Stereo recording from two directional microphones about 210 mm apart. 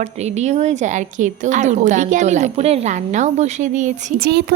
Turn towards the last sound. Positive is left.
turn(degrees=-35)  # may be behind; listen again after turning